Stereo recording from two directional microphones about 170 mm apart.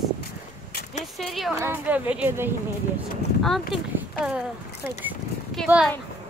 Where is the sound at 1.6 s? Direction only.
10° right (ahead or behind).